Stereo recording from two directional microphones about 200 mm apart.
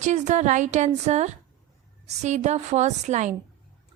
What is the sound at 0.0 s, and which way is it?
A woman's voice, 35° right (ahead or behind).